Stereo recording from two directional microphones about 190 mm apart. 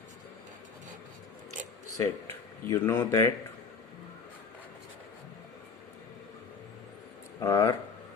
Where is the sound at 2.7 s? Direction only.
15° left (ahead or behind).